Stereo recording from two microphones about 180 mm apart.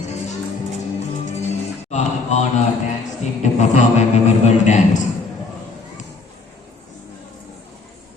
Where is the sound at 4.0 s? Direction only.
40° left (ahead or behind).